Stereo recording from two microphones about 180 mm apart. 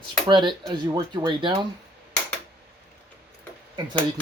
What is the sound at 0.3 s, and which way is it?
Speech, 25° right (ahead or behind).